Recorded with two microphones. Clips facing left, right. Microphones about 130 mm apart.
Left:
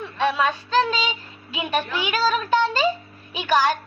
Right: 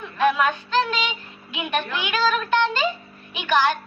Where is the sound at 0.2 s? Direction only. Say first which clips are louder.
Right 2 dB; 30° left (ahead or behind).